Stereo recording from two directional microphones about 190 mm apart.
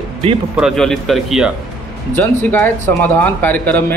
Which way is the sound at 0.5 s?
Centre (ahead or behind).